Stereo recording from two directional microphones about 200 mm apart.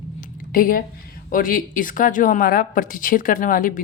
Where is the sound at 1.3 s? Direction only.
45° left (ahead or behind).